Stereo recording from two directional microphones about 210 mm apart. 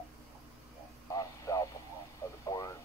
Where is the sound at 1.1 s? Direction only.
15° left (ahead or behind).